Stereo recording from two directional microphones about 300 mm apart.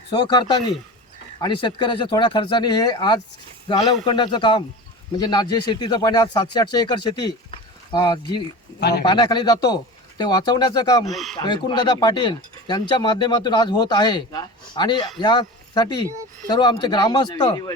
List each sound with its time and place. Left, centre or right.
0.1 s speech: centre
8.8 s speech: left
9.0 s speech: centre
11.0 s speech: centre
11.3 s speech: centre